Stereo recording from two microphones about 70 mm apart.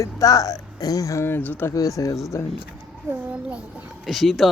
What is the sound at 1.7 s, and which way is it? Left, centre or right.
Speech, left.